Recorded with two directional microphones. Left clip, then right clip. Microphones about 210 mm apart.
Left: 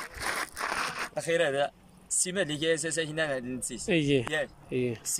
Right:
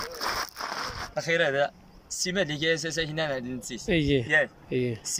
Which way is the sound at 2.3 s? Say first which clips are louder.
Right 2 dB; 5° left (ahead or behind).